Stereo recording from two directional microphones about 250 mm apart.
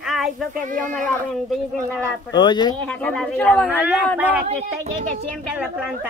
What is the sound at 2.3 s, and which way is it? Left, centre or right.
Speech, centre.